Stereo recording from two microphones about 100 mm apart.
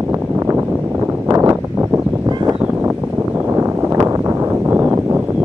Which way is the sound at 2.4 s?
10° right (ahead or behind).